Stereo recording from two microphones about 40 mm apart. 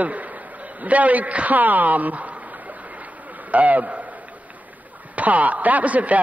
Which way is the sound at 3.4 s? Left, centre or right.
Right.